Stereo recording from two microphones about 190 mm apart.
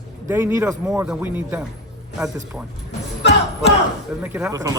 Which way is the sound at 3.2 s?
65° left (ahead or behind).